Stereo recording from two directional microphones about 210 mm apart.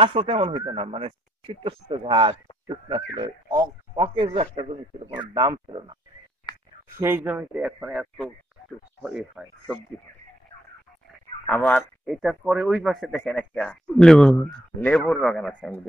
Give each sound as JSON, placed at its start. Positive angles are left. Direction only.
{"t": 0.0, "sound": "speech", "side_deg": -25}
{"t": 5.1, "sound": "speech", "side_deg": -15}
{"t": 7.0, "sound": "speech", "side_deg": -10}
{"t": 9.4, "sound": "speech", "side_deg": 0}
{"t": 11.4, "sound": "speech", "side_deg": 5}